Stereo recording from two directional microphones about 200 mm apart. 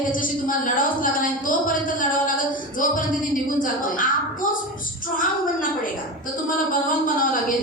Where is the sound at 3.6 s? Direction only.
45° left (ahead or behind).